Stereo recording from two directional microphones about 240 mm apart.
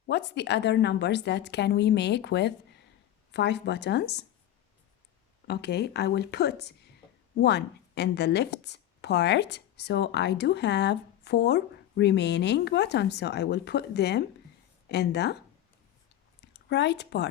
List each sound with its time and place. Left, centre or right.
0.1 s a woman's voice: left
5.5 s a woman's voice: left
16.5 s speech: left